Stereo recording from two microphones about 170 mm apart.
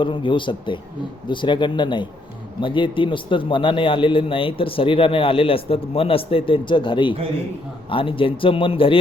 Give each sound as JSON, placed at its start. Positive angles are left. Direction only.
{"t": 0.0, "sound": "a man's voice", "side_deg": 30}